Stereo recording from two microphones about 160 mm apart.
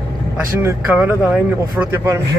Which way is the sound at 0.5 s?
15° right (ahead or behind).